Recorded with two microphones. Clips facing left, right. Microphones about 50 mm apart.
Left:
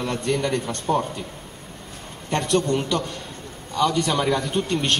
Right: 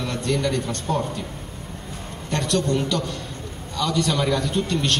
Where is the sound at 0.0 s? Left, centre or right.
Left.